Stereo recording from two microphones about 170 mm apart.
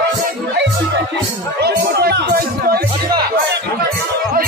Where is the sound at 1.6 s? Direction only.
70° right (ahead or behind).